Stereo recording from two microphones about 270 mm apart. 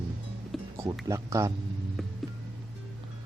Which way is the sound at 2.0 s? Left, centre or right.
Centre.